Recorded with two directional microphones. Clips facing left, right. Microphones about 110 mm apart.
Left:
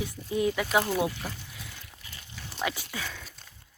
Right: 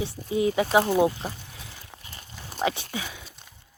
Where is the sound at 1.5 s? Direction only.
25° right (ahead or behind).